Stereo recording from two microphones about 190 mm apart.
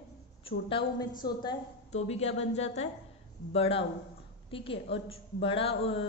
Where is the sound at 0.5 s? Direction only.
30° left (ahead or behind).